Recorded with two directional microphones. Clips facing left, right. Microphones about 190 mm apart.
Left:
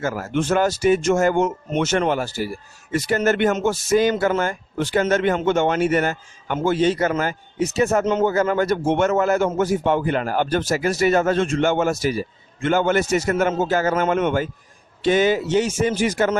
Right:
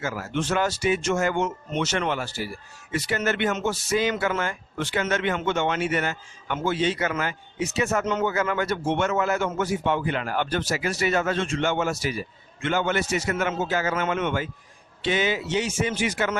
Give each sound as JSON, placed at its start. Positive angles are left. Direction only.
{"t": 0.0, "sound": "a man's voice", "side_deg": 50}